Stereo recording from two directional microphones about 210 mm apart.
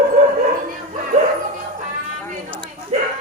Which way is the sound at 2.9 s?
35° right (ahead or behind).